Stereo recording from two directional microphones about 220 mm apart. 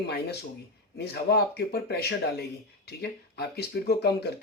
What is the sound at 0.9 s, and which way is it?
Speech, 45° left (ahead or behind).